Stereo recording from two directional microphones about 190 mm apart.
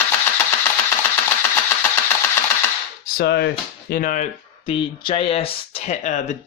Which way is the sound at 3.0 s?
60° left (ahead or behind).